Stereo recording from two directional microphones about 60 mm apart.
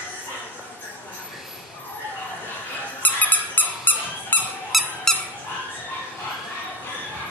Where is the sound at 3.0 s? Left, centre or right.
Left.